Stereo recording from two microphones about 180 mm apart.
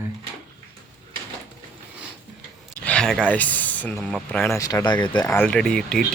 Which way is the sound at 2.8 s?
5° left (ahead or behind).